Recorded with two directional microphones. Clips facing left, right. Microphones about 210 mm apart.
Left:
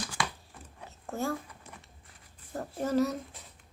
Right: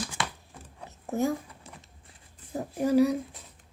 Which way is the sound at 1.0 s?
20° right (ahead or behind).